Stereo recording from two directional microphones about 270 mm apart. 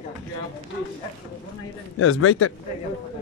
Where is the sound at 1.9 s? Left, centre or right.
Left.